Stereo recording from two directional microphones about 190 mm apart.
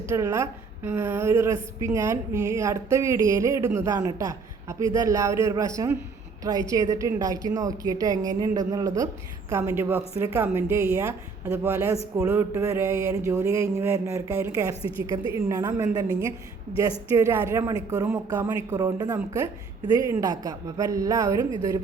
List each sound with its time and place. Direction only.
0.1 s a woman's voice: 15° right (ahead or behind)
14.8 s a woman's voice: 30° left (ahead or behind)
15.4 s a woman's voice: 15° right (ahead or behind)
17.2 s a woman's voice: 15° right (ahead or behind)